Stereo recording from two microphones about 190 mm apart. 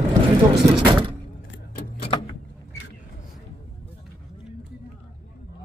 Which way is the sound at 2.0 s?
30° left (ahead or behind).